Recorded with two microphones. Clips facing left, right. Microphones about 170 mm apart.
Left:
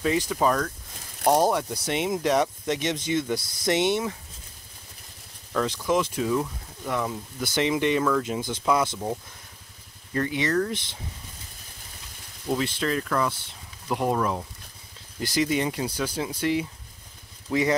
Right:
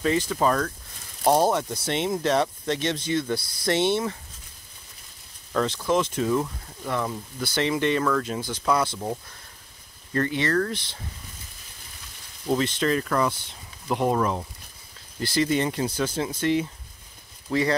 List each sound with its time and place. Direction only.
0.0 s speech: 10° left (ahead or behind)
5.7 s speech: 10° left (ahead or behind)
10.1 s speech: 10° left (ahead or behind)
12.5 s speech: 5° left (ahead or behind)
15.1 s speech: 15° left (ahead or behind)